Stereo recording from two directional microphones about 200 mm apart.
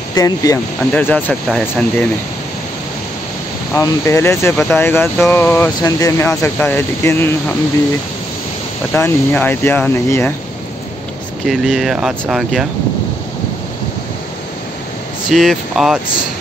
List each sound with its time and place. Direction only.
0.1 s speech: 15° left (ahead or behind)
0.9 s speech: 5° left (ahead or behind)
3.7 s speech: 15° left (ahead or behind)
8.9 s speech: 10° left (ahead or behind)
11.4 s speech: centre (ahead or behind)
15.2 s speech: centre (ahead or behind)